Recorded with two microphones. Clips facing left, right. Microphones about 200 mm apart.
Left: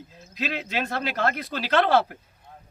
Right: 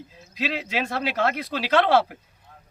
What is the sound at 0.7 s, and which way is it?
A man's voice, 5° right (ahead or behind).